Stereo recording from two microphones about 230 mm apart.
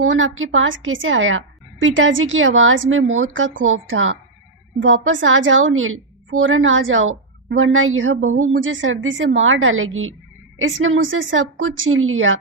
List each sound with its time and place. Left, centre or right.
0.0 s a woman's voice: right